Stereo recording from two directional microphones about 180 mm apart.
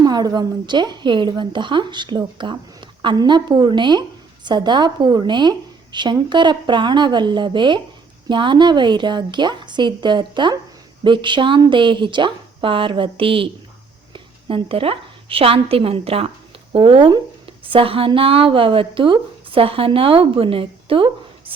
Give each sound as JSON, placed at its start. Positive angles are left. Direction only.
{"t": 0.0, "sound": "a woman's voice", "side_deg": -20}